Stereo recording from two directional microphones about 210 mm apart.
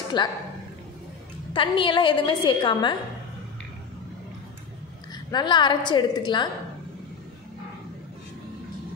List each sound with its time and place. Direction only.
0.1 s a woman's voice: 20° left (ahead or behind)
1.5 s a woman's voice: 25° left (ahead or behind)
5.3 s a woman's voice: 20° left (ahead or behind)